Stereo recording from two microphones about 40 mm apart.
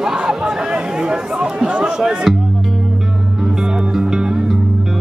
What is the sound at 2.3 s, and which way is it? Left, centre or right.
Speech, centre.